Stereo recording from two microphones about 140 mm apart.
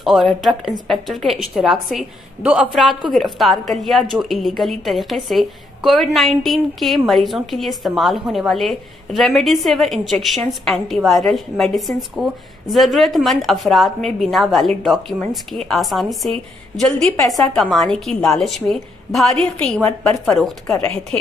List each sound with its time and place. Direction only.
0.0 s a woman's voice: centre (ahead or behind)